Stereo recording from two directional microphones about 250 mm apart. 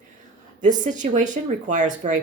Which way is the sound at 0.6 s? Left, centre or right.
Right.